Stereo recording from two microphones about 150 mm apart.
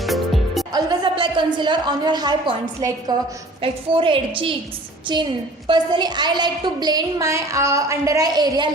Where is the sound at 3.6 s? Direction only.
35° right (ahead or behind).